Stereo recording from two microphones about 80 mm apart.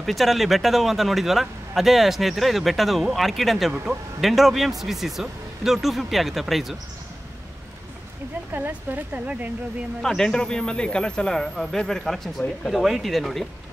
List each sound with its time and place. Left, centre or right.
0.0 s speech: centre
8.5 s speech: right
10.0 s speech: centre